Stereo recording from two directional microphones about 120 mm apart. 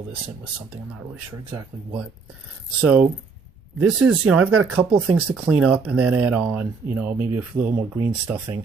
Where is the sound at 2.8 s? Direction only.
15° right (ahead or behind).